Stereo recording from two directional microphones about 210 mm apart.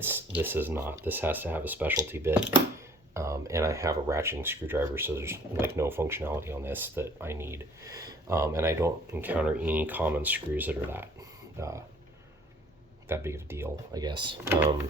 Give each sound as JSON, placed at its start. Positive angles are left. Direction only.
{"t": 0.0, "sound": "speech", "side_deg": -10}
{"t": 13.1, "sound": "speech", "side_deg": -10}
{"t": 14.4, "sound": "speech", "side_deg": -10}